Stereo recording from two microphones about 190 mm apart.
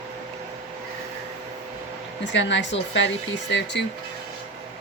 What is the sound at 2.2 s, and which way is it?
Speech, 70° left (ahead or behind).